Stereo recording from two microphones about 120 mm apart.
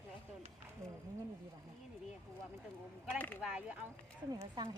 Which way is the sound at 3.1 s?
15° left (ahead or behind).